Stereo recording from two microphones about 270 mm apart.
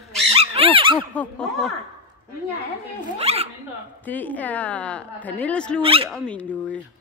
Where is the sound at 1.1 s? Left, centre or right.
Centre.